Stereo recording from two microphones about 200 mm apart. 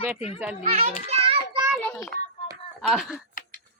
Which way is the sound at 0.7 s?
35° right (ahead or behind).